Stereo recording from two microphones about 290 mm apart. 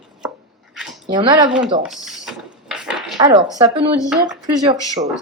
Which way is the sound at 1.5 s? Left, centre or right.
Centre.